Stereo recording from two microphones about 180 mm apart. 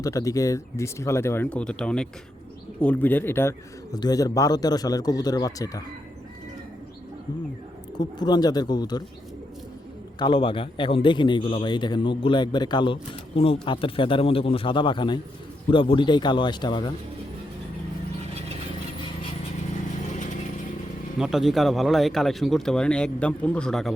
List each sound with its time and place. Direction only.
0.0 s a man's voice: 20° left (ahead or behind)
7.9 s a man's voice: 25° left (ahead or behind)
10.2 s a man's voice: 30° left (ahead or behind)
21.2 s speech: centre (ahead or behind)